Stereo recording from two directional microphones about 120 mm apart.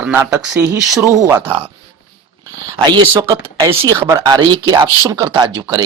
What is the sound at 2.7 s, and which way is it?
Speech, 40° right (ahead or behind).